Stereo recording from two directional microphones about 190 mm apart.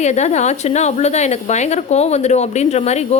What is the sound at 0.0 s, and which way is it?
A woman's voice, 35° left (ahead or behind).